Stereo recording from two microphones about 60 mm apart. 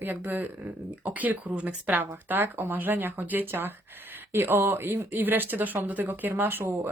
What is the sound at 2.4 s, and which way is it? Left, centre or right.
Speech, right.